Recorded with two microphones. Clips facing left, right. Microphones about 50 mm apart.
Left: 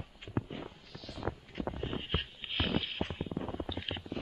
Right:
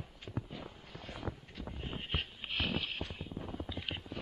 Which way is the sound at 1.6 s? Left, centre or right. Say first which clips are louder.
Left 8 dB; left.